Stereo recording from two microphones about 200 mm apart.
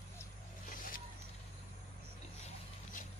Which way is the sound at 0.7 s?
45° left (ahead or behind).